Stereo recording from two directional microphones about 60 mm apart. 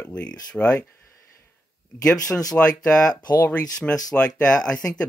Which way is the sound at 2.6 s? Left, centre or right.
Left.